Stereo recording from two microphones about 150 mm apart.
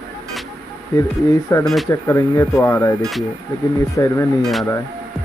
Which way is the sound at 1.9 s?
20° left (ahead or behind).